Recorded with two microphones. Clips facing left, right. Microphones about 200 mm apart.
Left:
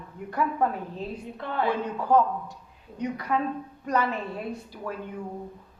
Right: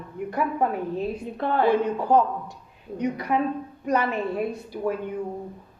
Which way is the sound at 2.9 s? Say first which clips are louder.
Right 3 dB; 15° right (ahead or behind).